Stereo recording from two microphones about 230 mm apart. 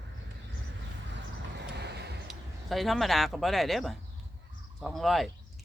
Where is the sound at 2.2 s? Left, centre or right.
Centre.